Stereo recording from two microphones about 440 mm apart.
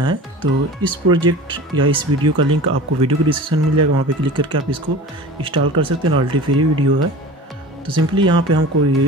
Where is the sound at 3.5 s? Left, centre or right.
Right.